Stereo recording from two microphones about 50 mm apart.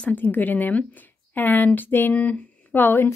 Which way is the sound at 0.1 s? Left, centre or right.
Left.